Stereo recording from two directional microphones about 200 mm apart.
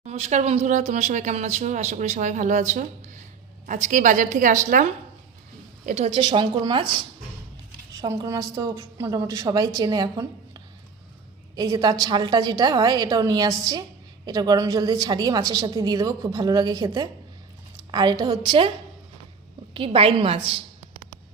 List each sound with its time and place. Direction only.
0.0 s a woman's voice: 35° right (ahead or behind)
7.9 s a woman's voice: 15° right (ahead or behind)
19.7 s a woman's voice: 25° right (ahead or behind)